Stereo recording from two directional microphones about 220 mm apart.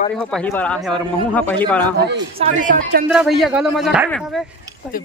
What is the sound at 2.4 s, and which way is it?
Speech, 35° right (ahead or behind).